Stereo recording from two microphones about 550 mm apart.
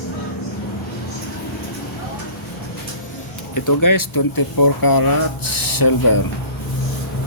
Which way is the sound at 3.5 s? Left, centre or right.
Left.